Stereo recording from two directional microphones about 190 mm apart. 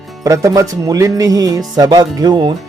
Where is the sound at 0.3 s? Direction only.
15° right (ahead or behind).